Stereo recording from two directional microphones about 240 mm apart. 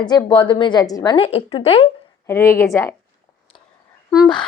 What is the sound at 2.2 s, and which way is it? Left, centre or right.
Speech, centre.